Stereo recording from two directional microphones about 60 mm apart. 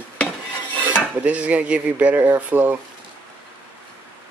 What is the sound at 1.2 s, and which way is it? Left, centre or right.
A man's voice, right.